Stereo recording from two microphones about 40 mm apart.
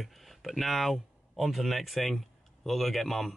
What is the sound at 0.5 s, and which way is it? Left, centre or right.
A man's voice, centre.